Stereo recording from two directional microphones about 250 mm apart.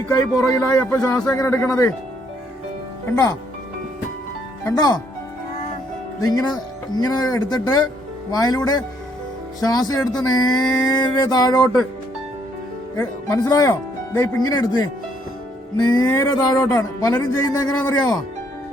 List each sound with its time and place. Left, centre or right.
0.1 s speech: centre
3.1 s speech: centre
4.6 s speech: centre
6.1 s speech: centre
10.6 s speech: centre
10.9 s speech: centre
13.0 s speech: centre